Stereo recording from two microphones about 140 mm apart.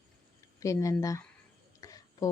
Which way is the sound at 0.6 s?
25° left (ahead or behind).